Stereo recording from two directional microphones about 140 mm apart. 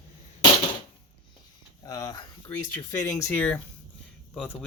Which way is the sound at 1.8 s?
25° left (ahead or behind).